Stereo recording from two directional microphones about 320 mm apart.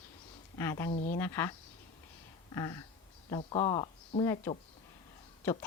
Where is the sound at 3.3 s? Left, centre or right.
Centre.